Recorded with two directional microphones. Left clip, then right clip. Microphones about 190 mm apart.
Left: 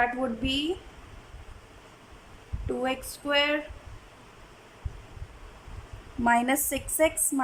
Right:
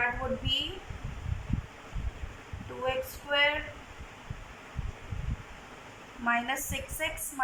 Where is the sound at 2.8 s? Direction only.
55° left (ahead or behind).